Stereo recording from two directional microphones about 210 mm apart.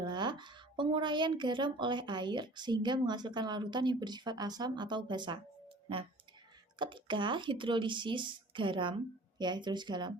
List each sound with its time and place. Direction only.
0.0 s speech: 20° right (ahead or behind)